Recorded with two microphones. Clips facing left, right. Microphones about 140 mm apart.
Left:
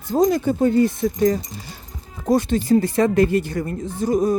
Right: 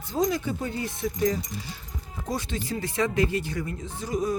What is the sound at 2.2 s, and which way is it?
A woman's voice, 50° left (ahead or behind).